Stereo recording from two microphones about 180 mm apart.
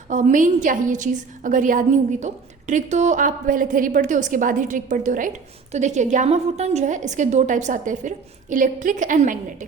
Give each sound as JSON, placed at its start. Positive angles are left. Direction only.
{"t": 0.1, "sound": "a woman's voice", "side_deg": -45}